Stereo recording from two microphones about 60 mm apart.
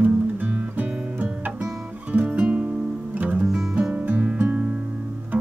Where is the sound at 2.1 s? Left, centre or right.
Right.